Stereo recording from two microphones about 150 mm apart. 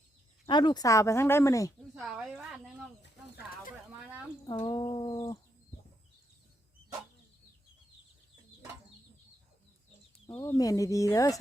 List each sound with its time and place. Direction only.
0.4 s speech: 30° left (ahead or behind)
2.0 s speech: 5° right (ahead or behind)
4.4 s speech: 35° left (ahead or behind)
10.4 s speech: 20° left (ahead or behind)